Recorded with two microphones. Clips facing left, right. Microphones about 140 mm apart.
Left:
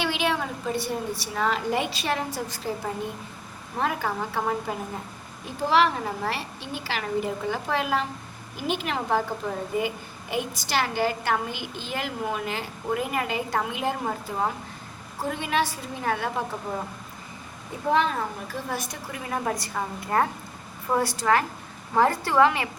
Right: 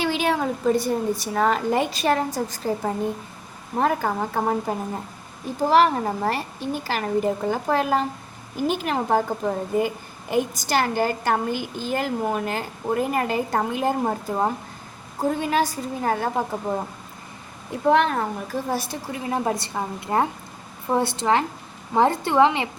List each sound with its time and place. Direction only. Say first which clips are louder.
0.0 s a woman's voice: right 4 dB; 40° right (ahead or behind)
5.6 s a woman's voice: right 4 dB; 45° right (ahead or behind)
17.9 s speech: right 2 dB; 65° right (ahead or behind)
18.4 s a woman's voice: right 5 dB; 40° right (ahead or behind); by 22.7 s 20° right (ahead or behind)